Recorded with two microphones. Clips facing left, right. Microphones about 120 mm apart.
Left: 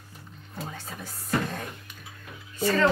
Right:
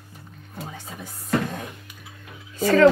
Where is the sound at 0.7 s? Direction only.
15° right (ahead or behind).